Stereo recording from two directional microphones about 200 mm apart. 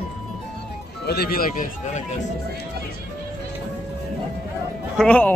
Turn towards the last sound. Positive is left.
turn(degrees=5)  # may be behind; listen again after turning